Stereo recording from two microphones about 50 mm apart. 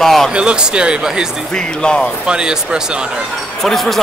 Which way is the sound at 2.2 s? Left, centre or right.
Centre.